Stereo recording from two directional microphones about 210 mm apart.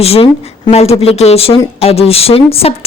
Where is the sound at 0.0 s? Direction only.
30° left (ahead or behind).